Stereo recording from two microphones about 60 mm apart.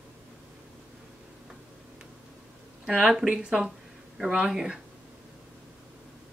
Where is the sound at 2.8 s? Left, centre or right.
Centre.